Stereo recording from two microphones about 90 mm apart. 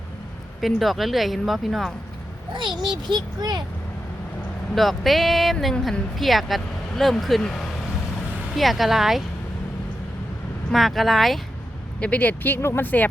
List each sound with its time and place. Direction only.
0.6 s speech: centre (ahead or behind)
2.5 s a child's voice: 60° right (ahead or behind)
4.7 s speech: centre (ahead or behind)
10.7 s speech: centre (ahead or behind)
11.9 s speech: 15° left (ahead or behind)